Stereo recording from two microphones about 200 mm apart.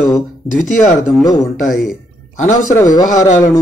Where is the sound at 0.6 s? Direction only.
40° left (ahead or behind).